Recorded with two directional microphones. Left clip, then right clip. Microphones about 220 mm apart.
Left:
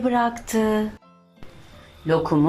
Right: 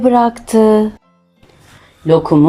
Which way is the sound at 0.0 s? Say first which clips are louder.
Right 10 dB; 25° right (ahead or behind).